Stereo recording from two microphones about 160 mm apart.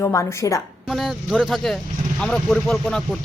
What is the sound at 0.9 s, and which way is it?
Speech, centre (ahead or behind).